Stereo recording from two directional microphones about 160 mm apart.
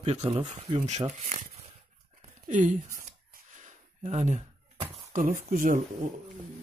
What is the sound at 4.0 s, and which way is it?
Speech, 45° right (ahead or behind).